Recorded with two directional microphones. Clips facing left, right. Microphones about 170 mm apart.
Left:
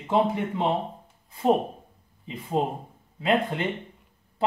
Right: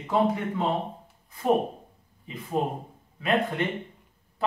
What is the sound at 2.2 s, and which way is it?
Speech, 25° left (ahead or behind).